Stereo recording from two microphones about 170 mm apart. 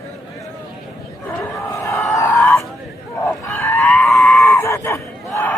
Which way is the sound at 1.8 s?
15° left (ahead or behind).